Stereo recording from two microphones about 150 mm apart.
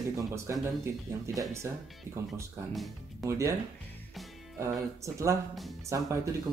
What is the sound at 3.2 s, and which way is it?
Speech, 20° right (ahead or behind).